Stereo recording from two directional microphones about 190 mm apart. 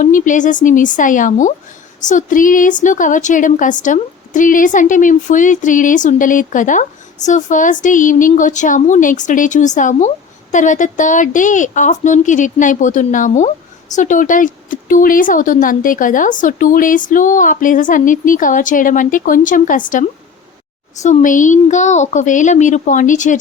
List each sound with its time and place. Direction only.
0.0 s a woman's voice: 40° left (ahead or behind)
21.0 s a woman's voice: 40° left (ahead or behind)